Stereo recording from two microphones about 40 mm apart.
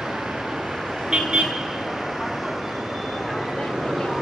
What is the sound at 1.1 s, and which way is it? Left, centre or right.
Vehicle, right.